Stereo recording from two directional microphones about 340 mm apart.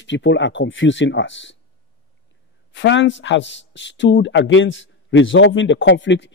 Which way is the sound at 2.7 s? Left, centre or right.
Left.